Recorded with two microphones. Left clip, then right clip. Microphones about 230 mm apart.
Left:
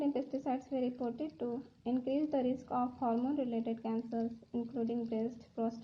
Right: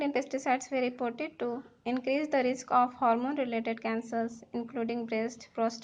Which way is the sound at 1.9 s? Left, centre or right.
Centre.